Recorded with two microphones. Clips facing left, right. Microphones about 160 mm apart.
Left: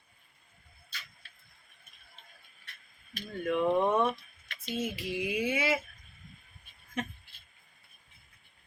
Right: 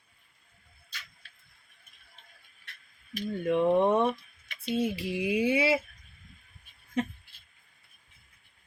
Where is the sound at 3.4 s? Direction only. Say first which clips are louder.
Right 3 dB; 30° right (ahead or behind).